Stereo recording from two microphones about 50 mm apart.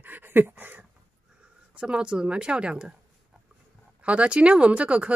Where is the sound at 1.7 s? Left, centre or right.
Centre.